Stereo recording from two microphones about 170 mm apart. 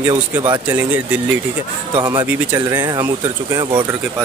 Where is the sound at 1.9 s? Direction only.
20° right (ahead or behind).